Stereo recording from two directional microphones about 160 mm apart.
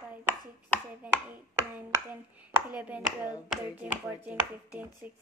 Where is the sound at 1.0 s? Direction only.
10° right (ahead or behind).